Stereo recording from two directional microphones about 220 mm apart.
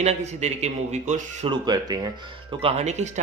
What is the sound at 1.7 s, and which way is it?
Speech, 20° right (ahead or behind).